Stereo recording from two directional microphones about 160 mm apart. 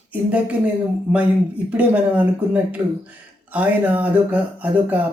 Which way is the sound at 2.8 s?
20° right (ahead or behind).